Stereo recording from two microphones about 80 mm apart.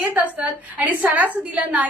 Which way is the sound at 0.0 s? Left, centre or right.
Centre.